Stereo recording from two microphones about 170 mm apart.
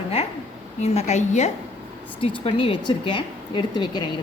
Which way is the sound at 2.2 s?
30° left (ahead or behind).